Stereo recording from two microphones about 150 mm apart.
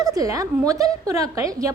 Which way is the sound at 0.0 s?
25° right (ahead or behind).